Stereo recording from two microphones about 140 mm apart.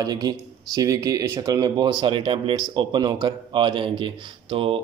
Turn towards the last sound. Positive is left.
turn(degrees=-40)  # may be behind; listen again after turning